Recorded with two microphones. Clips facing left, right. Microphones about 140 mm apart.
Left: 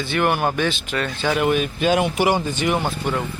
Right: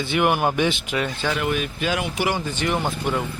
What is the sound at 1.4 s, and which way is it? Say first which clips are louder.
Speech: left 5 dB; 25° left (ahead or behind).